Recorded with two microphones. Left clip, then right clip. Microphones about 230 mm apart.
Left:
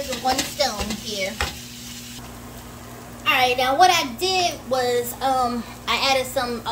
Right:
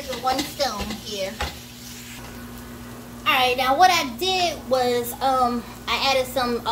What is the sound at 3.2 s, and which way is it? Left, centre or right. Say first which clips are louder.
Speech: left 1 dB; centre.